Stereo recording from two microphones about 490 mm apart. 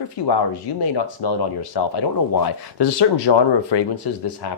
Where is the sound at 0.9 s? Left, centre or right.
Left.